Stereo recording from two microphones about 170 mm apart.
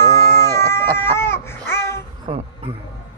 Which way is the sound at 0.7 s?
15° left (ahead or behind).